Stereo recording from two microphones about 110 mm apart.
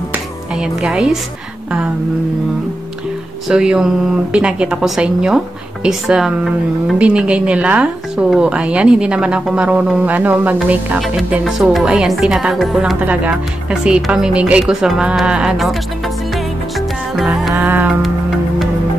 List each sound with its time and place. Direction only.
0.6 s a woman's voice: 5° right (ahead or behind)
3.4 s a woman's voice: 10° right (ahead or behind)
13.0 s a woman's voice: 15° right (ahead or behind)
16.3 s music: centre (ahead or behind)
17.6 s music: 20° right (ahead or behind)
18.0 s music: centre (ahead or behind)